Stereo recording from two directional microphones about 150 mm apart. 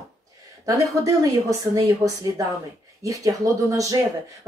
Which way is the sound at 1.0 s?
25° right (ahead or behind).